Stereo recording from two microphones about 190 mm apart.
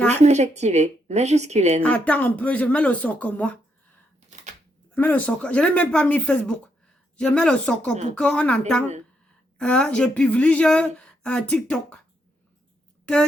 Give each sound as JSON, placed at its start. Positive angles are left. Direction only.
{"t": 0.2, "sound": "a woman's voice", "side_deg": -35}
{"t": 1.8, "sound": "speech", "side_deg": 10}
{"t": 4.9, "sound": "a woman's voice", "side_deg": 10}